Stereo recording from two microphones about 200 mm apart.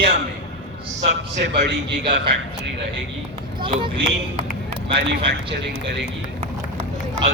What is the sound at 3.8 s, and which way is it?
Speech, 25° right (ahead or behind).